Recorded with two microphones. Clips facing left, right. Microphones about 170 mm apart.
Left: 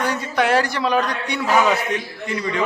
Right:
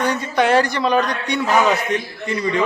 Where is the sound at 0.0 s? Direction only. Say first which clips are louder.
Right 2 dB; 5° left (ahead or behind).